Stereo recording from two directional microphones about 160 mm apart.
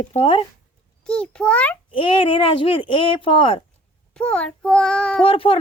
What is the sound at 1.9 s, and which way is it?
Speech, 30° left (ahead or behind).